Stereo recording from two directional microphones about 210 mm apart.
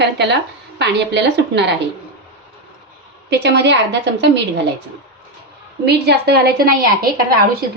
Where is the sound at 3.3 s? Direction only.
55° right (ahead or behind).